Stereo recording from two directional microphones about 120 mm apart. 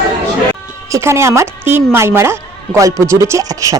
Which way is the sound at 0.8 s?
25° right (ahead or behind).